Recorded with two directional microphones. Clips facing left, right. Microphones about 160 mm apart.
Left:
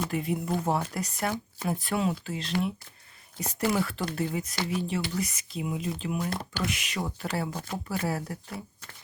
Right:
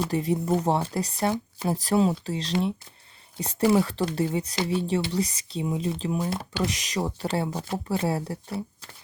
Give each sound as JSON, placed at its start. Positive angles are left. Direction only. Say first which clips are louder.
{"t": 0.0, "sound": "speech", "louder": "right 4 dB", "side_deg": -35}